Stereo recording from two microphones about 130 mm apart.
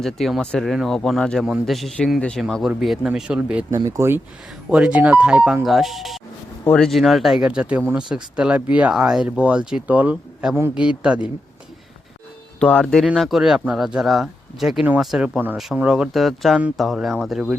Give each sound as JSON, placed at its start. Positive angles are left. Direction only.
{"t": 0.0, "sound": "speech", "side_deg": 0}
{"t": 3.7, "sound": "speech", "side_deg": -25}
{"t": 4.7, "sound": "speech", "side_deg": -5}
{"t": 12.5, "sound": "speech", "side_deg": 10}